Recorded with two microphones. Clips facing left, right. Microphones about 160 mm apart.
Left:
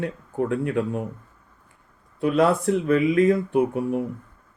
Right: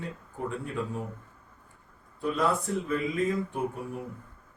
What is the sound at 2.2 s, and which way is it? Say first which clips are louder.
Speech: left 8 dB; 75° left (ahead or behind).